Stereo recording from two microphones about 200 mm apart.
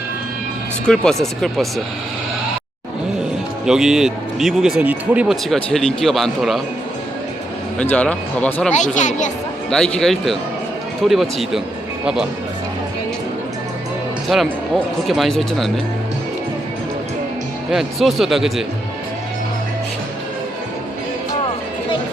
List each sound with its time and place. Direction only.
0.9 s speech: 5° left (ahead or behind)
3.7 s speech: 5° right (ahead or behind)
7.8 s speech: 5° left (ahead or behind)
8.7 s speech: 35° left (ahead or behind)
9.6 s speech: 5° left (ahead or behind)
14.3 s speech: centre (ahead or behind)
17.7 s speech: centre (ahead or behind)